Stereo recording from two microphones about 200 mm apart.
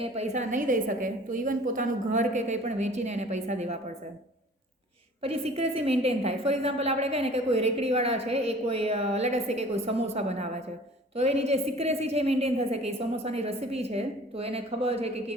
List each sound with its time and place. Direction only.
0.0 s a woman's voice: 35° right (ahead or behind)
5.2 s a woman's voice: 30° right (ahead or behind)